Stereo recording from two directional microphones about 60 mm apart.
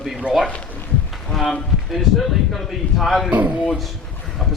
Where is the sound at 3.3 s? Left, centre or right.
Right.